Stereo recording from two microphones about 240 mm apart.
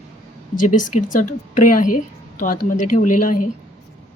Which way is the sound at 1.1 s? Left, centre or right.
Left.